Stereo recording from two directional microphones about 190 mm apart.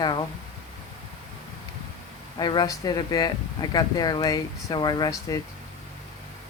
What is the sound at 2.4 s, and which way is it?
Speech, 20° left (ahead or behind).